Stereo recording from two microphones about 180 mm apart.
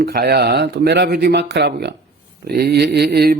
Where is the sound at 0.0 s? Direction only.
60° right (ahead or behind).